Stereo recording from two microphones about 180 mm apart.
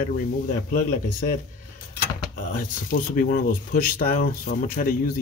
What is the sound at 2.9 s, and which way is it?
Speech, 50° left (ahead or behind).